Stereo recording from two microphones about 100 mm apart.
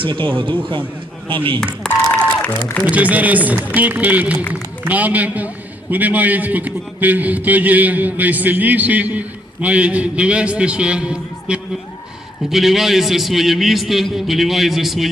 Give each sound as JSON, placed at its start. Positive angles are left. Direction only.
{"t": 0.0, "sound": "speech", "side_deg": -60}
{"t": 1.6, "sound": "a sound", "side_deg": 5}
{"t": 2.4, "sound": "speech", "side_deg": 20}
{"t": 2.9, "sound": "a man's voice", "side_deg": -15}